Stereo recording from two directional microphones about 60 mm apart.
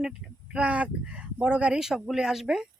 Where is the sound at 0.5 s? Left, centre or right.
Right.